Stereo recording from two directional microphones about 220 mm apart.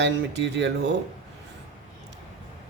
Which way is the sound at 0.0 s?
55° right (ahead or behind).